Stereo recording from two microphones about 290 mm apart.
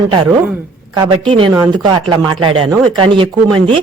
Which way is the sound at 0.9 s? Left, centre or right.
Centre.